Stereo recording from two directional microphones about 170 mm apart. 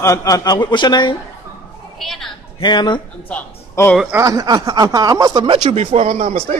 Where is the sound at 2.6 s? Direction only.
25° left (ahead or behind).